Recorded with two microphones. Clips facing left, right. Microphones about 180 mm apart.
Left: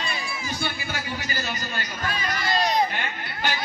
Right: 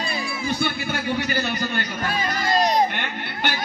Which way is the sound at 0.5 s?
60° right (ahead or behind).